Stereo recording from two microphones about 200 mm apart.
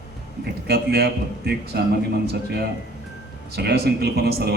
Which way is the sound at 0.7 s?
55° right (ahead or behind).